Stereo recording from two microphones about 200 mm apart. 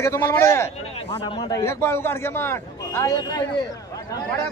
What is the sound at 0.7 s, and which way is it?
A man's voice, 30° left (ahead or behind).